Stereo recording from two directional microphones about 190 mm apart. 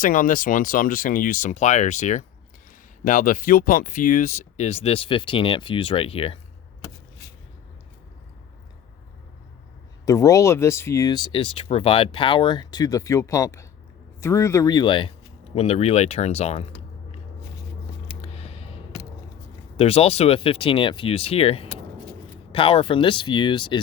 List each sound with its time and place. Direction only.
0.0 s speech: 45° left (ahead or behind); by 6.4 s 30° left (ahead or behind)
10.1 s speech: 15° left (ahead or behind); by 17.2 s 35° left (ahead or behind)
18.2 s a sound: 30° left (ahead or behind)
19.7 s speech: 30° left (ahead or behind)